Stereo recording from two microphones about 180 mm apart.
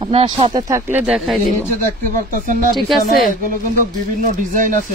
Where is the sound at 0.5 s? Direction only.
15° right (ahead or behind).